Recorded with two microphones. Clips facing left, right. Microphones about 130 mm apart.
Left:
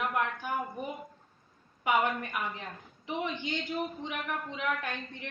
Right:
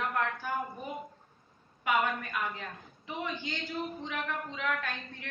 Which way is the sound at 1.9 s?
20° left (ahead or behind).